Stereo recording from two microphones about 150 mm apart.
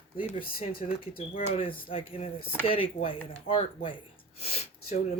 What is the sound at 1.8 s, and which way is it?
Speech, 40° left (ahead or behind).